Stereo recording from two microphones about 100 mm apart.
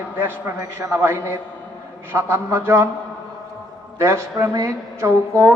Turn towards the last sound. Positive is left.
turn(degrees=-30)  # may be behind; listen again after turning